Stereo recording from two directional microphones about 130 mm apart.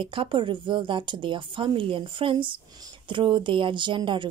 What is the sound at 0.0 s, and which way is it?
Speech, 40° right (ahead or behind).